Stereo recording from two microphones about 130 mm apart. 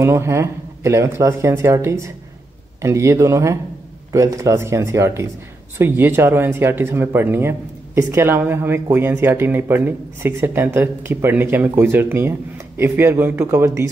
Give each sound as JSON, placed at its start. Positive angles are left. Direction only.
{"t": 0.0, "sound": "speech", "side_deg": -20}